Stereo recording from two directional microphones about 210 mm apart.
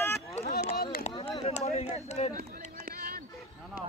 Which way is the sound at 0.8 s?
45° left (ahead or behind).